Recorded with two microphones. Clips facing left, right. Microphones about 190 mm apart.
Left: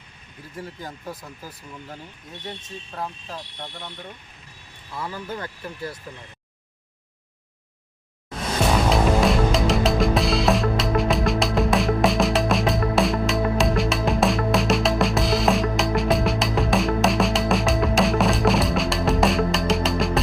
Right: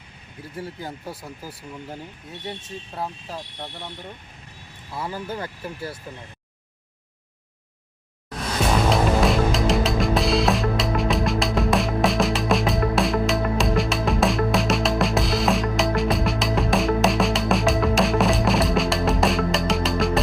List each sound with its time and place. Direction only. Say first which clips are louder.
4.9 s speech: right 2 dB; 25° right (ahead or behind)
8.9 s music: even; centre (ahead or behind)